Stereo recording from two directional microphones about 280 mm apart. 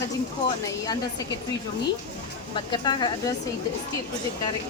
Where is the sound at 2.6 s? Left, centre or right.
Centre.